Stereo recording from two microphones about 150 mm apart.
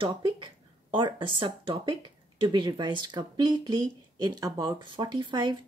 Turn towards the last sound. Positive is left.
turn(degrees=-30)  # may be behind; listen again after turning